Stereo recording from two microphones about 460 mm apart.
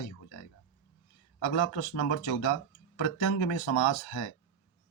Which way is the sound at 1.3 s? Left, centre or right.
Left.